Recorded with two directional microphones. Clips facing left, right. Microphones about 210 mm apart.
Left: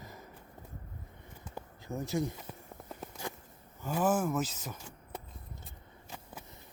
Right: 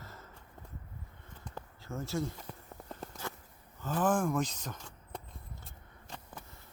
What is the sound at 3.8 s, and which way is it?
Speech, 10° left (ahead or behind).